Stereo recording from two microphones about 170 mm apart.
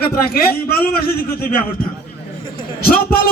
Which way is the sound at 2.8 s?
60° left (ahead or behind).